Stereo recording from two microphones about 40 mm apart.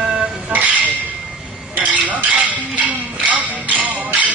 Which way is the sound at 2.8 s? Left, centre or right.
Right.